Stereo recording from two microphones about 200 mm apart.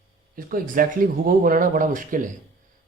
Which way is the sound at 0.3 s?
45° right (ahead or behind).